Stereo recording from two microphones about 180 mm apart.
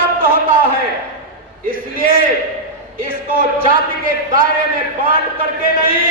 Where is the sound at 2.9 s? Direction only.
50° right (ahead or behind).